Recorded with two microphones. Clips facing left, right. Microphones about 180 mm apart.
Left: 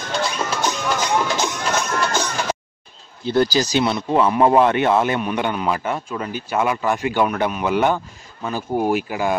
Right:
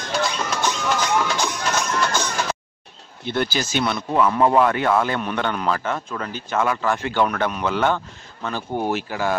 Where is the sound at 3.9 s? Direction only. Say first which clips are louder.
Left 2 dB; 20° left (ahead or behind).